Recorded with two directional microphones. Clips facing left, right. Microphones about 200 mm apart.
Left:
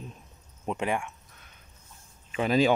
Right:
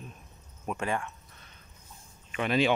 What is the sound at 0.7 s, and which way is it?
Speech, 15° left (ahead or behind).